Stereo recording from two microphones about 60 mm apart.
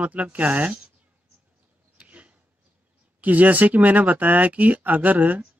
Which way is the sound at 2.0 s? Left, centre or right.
Right.